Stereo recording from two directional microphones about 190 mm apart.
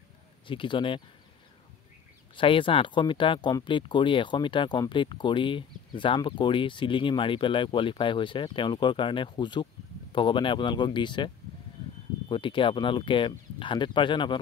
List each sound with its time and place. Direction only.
0.5 s speech: 25° left (ahead or behind)
2.3 s speech: 25° left (ahead or behind)